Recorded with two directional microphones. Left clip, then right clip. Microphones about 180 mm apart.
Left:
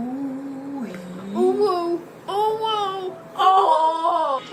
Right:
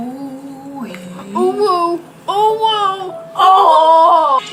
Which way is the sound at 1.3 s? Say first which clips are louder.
Right 6 dB; 15° right (ahead or behind).